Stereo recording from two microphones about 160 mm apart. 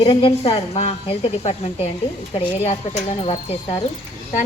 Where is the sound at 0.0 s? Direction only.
35° left (ahead or behind).